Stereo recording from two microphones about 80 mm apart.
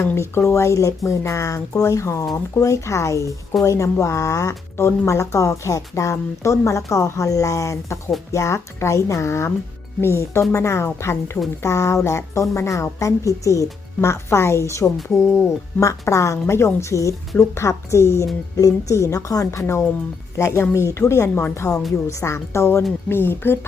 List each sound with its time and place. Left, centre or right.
0.0 s speech: left